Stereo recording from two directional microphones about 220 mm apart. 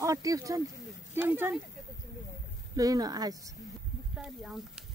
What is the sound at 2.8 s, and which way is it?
Speech, 15° right (ahead or behind).